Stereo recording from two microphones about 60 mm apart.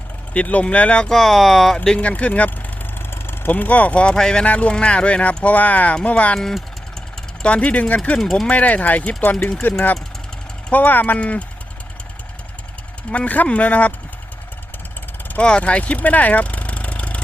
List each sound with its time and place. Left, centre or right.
0.3 s speech: left
1.1 s speech: centre
2.0 s speech: left
3.1 s speech: left
7.4 s speech: left
8.2 s speech: centre
8.4 s speech: left
10.7 s speech: left
13.1 s speech: left
15.4 s speech: centre